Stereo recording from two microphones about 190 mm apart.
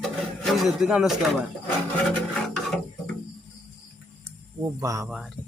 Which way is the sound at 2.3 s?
Centre (ahead or behind).